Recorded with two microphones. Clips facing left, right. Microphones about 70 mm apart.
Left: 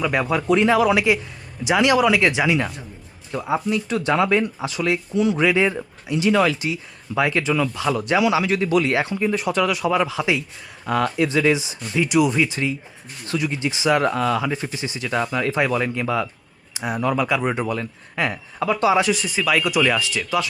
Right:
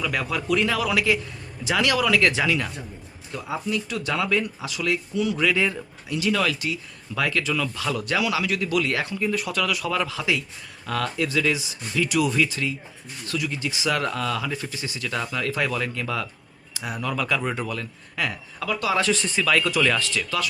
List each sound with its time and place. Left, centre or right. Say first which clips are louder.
0.0 s speech: left 6 dB; left
3.3 s speech: left 6 dB; left